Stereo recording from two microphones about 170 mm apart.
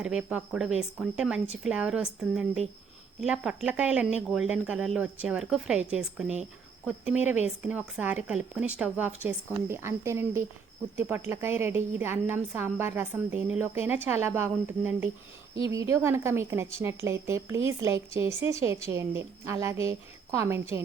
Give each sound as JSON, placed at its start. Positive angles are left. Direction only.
{"t": 0.0, "sound": "a woman's voice", "side_deg": -5}